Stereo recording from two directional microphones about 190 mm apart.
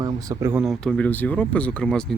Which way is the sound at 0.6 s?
Centre (ahead or behind).